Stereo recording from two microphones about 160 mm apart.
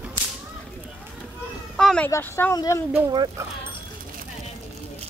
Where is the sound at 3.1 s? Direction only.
25° right (ahead or behind).